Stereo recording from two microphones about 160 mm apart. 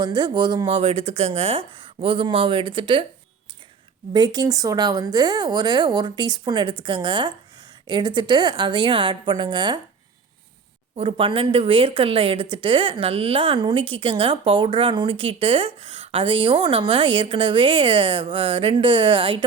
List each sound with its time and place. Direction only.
0.0 s speech: 30° right (ahead or behind)
4.1 s speech: 25° right (ahead or behind)
10.9 s speech: 35° right (ahead or behind)